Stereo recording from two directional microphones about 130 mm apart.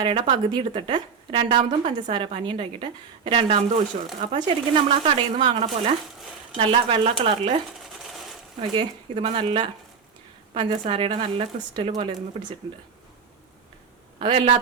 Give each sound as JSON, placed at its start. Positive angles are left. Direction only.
{"t": 0.0, "sound": "a woman's voice", "side_deg": -40}
{"t": 8.7, "sound": "a woman's voice", "side_deg": -40}
{"t": 14.2, "sound": "speech", "side_deg": -40}